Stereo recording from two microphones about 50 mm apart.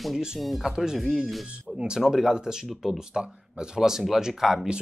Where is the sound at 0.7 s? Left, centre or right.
Centre.